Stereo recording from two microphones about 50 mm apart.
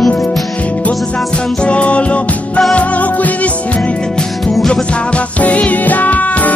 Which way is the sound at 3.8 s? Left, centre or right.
Centre.